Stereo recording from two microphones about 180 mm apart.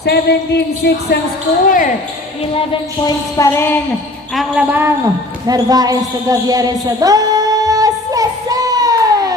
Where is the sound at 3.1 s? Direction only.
20° left (ahead or behind).